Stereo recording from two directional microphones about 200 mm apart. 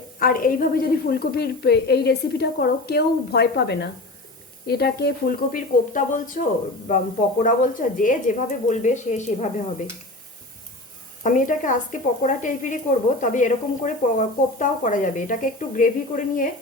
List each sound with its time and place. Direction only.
0.2 s a woman's voice: 45° left (ahead or behind)
11.2 s speech: 40° left (ahead or behind)